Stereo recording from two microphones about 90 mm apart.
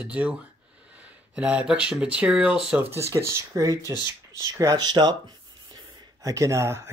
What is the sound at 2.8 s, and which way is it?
Speech, 30° right (ahead or behind).